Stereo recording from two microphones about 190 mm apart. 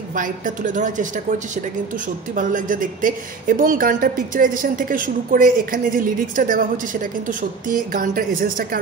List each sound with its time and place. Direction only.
0.1 s a woman's voice: 45° right (ahead or behind)
2.3 s speech: 45° right (ahead or behind)